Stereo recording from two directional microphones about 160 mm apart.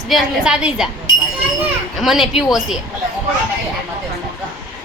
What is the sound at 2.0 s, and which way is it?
Speech, centre (ahead or behind).